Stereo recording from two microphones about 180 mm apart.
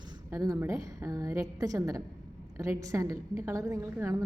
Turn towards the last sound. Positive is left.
turn(degrees=-15)  # may be behind; listen again after turning